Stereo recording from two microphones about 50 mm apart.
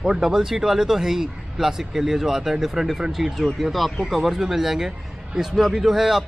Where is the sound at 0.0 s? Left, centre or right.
Centre.